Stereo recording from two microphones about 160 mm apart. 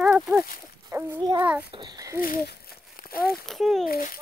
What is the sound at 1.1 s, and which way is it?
A child's voice, 25° right (ahead or behind).